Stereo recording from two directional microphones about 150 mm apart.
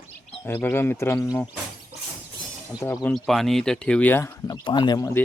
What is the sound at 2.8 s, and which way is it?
Speech, 15° left (ahead or behind).